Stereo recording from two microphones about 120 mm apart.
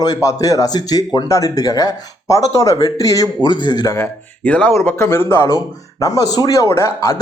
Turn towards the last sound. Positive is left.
turn(degrees=25)  # may be behind; listen again after turning